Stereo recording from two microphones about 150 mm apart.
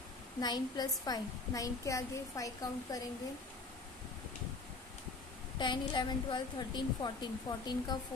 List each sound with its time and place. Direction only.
0.4 s a woman's voice: 25° left (ahead or behind)
5.6 s a woman's voice: 30° left (ahead or behind)